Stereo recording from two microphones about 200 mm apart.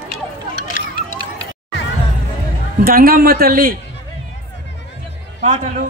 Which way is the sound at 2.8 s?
50° right (ahead or behind).